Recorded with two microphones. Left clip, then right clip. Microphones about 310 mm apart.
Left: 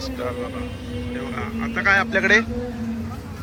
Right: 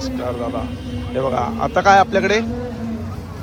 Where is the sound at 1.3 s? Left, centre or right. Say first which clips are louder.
Right 7 dB; centre.